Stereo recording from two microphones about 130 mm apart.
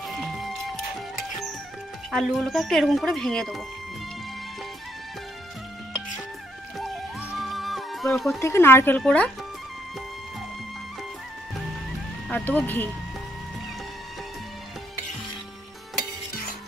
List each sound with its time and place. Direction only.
0.2 s music: centre (ahead or behind)
2.0 s speech: centre (ahead or behind)
7.3 s music: centre (ahead or behind)
8.4 s speech: 20° left (ahead or behind)
12.3 s speech: 15° left (ahead or behind)